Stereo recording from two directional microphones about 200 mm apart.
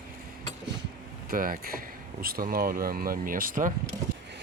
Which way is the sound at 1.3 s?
45° right (ahead or behind).